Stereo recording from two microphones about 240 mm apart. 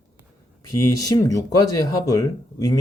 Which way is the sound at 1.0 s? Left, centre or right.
Centre.